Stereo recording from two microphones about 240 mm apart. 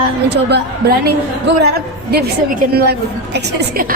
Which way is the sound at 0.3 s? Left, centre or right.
Right.